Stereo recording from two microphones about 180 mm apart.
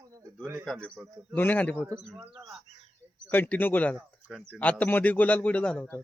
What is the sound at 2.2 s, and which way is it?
Speech, 5° right (ahead or behind).